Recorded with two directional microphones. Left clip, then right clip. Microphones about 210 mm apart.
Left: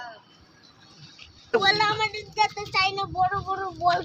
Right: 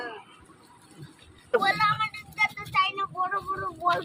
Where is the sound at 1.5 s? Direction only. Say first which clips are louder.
Left 2 dB; 55° left (ahead or behind).